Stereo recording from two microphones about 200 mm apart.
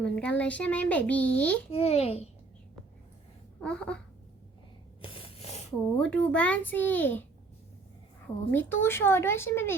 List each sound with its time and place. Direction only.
0.0 s a child's voice: 5° left (ahead or behind)
1.7 s a child's voice: 30° left (ahead or behind)
3.6 s speech: 5° left (ahead or behind)
5.0 s a sound: 25° left (ahead or behind)
6.0 s a child's voice: 5° left (ahead or behind)
8.4 s a child's voice: 10° left (ahead or behind)